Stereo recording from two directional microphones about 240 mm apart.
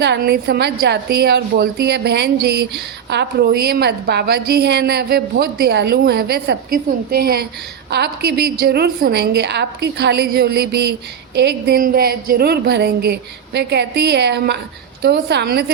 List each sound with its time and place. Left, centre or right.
0.0 s a woman's voice: right